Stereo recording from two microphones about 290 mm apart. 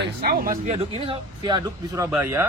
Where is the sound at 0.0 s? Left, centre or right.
Right.